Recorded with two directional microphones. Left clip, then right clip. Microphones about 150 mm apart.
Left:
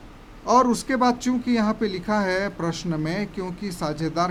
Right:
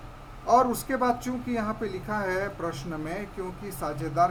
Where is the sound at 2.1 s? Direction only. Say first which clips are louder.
Left 5 dB; 45° left (ahead or behind).